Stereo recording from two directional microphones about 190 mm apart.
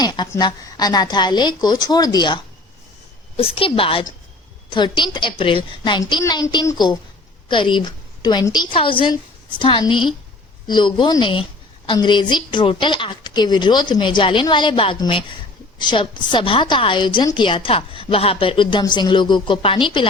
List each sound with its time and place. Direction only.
0.0 s a woman's voice: 20° left (ahead or behind)